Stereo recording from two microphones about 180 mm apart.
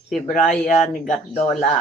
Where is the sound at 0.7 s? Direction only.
40° left (ahead or behind).